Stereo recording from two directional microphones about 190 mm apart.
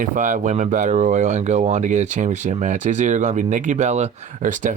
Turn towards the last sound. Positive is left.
turn(degrees=-45)  # may be behind; listen again after turning